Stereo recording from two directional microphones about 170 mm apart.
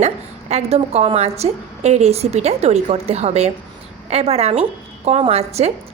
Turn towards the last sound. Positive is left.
turn(degrees=-40)  # may be behind; listen again after turning